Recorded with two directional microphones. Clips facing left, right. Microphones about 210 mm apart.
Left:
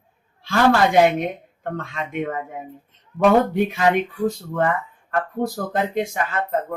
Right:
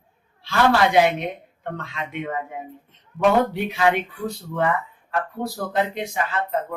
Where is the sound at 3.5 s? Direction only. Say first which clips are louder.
Left 6 dB; 50° left (ahead or behind).